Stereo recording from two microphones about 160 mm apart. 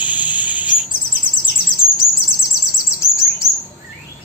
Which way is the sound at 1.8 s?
65° left (ahead or behind).